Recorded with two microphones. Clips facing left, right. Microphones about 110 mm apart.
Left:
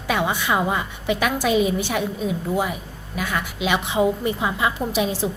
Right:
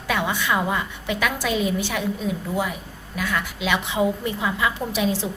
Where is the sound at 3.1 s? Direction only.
20° left (ahead or behind).